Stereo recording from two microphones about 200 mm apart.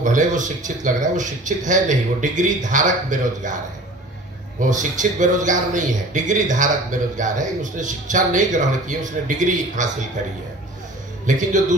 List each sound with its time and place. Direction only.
0.0 s a man's voice: 40° right (ahead or behind)
4.6 s a man's voice: 40° right (ahead or behind)
11.2 s a man's voice: 40° right (ahead or behind)